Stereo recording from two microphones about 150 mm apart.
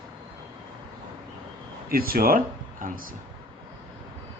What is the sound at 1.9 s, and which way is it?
Speech, 80° right.